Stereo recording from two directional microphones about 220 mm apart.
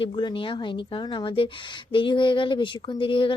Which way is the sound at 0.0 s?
20° left (ahead or behind).